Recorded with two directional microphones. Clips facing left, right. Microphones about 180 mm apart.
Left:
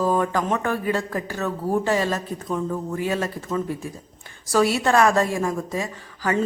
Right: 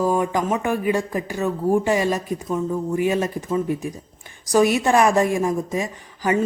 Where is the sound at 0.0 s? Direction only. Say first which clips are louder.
Right 1 dB; 15° right (ahead or behind).